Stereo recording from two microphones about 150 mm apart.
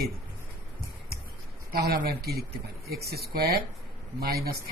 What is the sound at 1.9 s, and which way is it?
Speech, 85° right.